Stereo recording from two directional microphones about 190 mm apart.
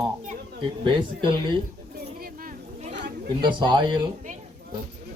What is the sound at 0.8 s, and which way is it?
Speech, 25° right (ahead or behind).